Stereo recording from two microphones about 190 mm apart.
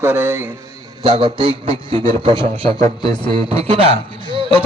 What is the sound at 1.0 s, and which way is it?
A man's voice, 25° right (ahead or behind).